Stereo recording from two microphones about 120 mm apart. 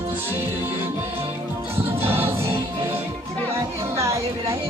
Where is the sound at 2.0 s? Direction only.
55° right (ahead or behind).